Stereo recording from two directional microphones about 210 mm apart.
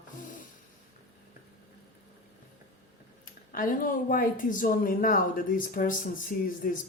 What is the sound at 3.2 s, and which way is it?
Speech, 40° left (ahead or behind).